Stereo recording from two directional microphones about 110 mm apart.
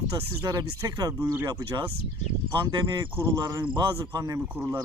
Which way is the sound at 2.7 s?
40° right (ahead or behind).